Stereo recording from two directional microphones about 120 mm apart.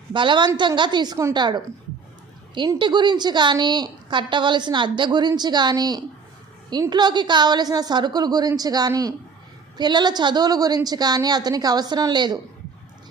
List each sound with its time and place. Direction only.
0.1 s a woman's voice: 40° right (ahead or behind)
2.7 s a woman's voice: 40° right (ahead or behind)